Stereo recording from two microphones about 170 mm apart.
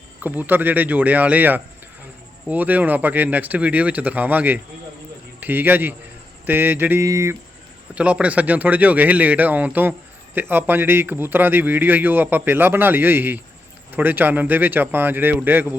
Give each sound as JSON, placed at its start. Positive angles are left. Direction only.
{"t": 0.2, "sound": "a man's voice", "side_deg": -10}
{"t": 7.9, "sound": "speech", "side_deg": -10}